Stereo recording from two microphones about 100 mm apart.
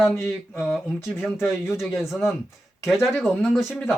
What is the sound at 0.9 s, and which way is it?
Speech, 25° left (ahead or behind).